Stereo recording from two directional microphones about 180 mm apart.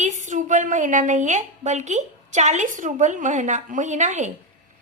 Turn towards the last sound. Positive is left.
turn(degrees=-40)  # may be behind; listen again after turning